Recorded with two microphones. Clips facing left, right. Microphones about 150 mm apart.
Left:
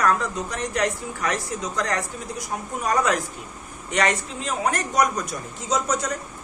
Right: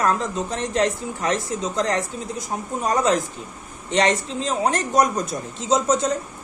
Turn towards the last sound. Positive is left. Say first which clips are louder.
# right 5 dB
turn(degrees=-25)  # may be behind; listen again after turning